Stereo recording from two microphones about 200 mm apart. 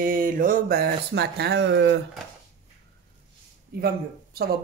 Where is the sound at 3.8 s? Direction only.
50° right (ahead or behind).